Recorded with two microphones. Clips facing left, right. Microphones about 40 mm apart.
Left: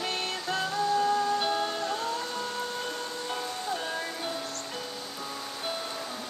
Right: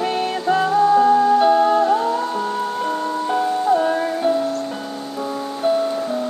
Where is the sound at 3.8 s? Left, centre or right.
Right.